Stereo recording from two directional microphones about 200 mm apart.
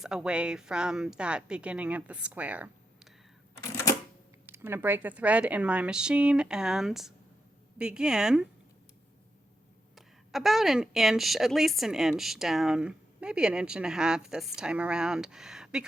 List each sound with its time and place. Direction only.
0.0 s a woman's voice: 5° right (ahead or behind)
3.6 s camera: 15° left (ahead or behind)
4.4 s a woman's voice: 10° right (ahead or behind)
9.9 s a woman's voice: centre (ahead or behind)